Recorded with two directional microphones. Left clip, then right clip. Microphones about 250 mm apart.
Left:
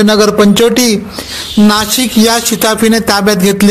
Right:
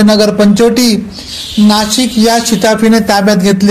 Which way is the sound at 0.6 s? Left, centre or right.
Left.